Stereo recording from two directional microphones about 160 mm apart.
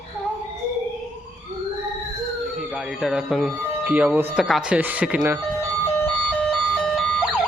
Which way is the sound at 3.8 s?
10° right (ahead or behind).